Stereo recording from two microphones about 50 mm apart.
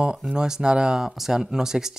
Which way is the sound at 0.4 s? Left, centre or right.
Centre.